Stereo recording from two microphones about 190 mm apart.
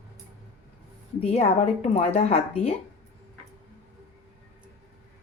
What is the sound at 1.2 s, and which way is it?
Speech, 30° left (ahead or behind).